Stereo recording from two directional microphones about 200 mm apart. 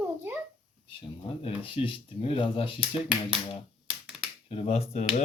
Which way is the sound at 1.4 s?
25° left (ahead or behind).